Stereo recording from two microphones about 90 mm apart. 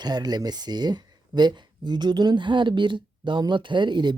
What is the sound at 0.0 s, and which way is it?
Speech, 50° right (ahead or behind).